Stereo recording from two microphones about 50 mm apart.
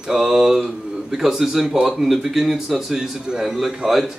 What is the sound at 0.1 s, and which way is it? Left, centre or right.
Speech, centre.